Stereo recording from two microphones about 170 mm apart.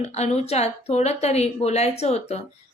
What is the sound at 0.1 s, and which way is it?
A woman's voice, 40° left (ahead or behind).